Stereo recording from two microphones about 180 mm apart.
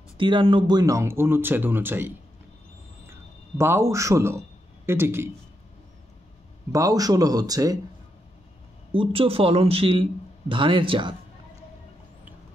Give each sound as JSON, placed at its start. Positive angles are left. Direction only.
{"t": 0.2, "sound": "a man's voice", "side_deg": -30}
{"t": 6.7, "sound": "speech", "side_deg": -20}
{"t": 8.9, "sound": "speech", "side_deg": -30}